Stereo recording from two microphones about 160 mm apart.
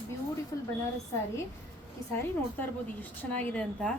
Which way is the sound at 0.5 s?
20° left (ahead or behind).